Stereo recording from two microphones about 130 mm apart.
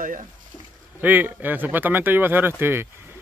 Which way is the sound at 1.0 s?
15° right (ahead or behind).